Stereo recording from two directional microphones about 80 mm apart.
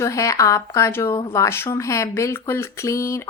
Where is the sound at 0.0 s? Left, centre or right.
Left.